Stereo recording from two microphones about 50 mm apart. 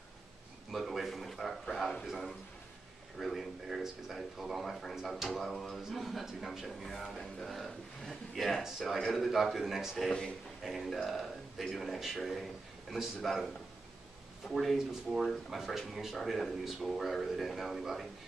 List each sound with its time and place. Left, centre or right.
0.7 s a sound: centre
3.2 s speech: centre
6.8 s speech: centre
10.0 s a man's voice: centre
10.6 s speech: centre
14.5 s speech: centre